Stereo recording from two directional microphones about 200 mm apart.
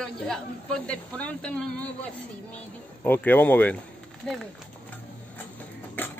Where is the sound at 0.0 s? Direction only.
5° left (ahead or behind).